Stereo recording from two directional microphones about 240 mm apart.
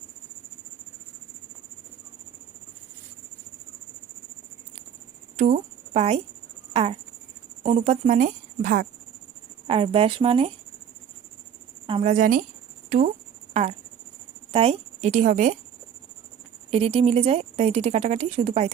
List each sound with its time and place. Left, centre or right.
5.4 s speech: right
9.6 s speech: right
11.9 s a woman's voice: right
13.5 s a woman's voice: right
16.7 s speech: right